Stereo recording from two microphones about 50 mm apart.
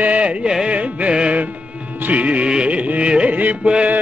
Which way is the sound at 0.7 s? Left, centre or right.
Right.